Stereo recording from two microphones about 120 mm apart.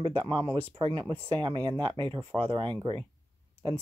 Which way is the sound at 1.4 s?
40° right (ahead or behind).